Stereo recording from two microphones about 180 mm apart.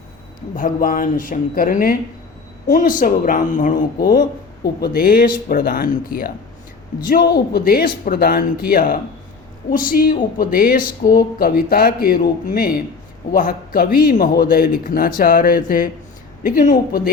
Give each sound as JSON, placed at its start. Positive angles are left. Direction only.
{"t": 0.5, "sound": "a man's voice", "side_deg": 50}
{"t": 7.5, "sound": "a man's voice", "side_deg": 55}